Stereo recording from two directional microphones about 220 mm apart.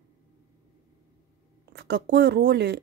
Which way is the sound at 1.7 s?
50° right (ahead or behind).